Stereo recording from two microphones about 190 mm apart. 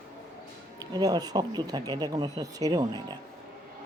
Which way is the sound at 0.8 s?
20° right (ahead or behind).